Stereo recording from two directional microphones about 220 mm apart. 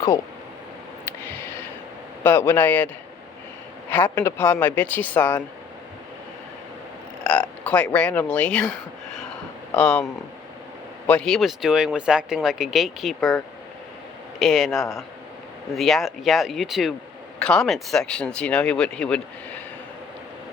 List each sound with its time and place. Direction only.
1.0 s a sound: 10° left (ahead or behind)
2.2 s speech: 10° left (ahead or behind)
7.6 s speech: 5° left (ahead or behind)
9.7 s speech: 5° left (ahead or behind)